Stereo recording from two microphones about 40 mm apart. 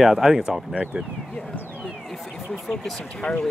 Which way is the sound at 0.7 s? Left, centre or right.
Right.